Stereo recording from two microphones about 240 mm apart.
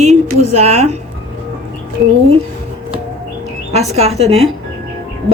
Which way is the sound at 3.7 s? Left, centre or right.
Right.